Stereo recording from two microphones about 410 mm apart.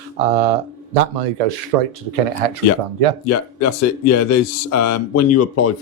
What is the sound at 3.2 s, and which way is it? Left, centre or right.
Speech, left.